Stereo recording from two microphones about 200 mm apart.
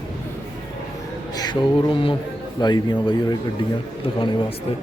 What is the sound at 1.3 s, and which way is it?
Speech, 20° left (ahead or behind).